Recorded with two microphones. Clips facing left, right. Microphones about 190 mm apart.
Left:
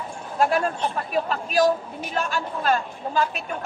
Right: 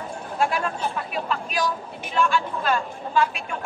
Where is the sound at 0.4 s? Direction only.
40° left (ahead or behind).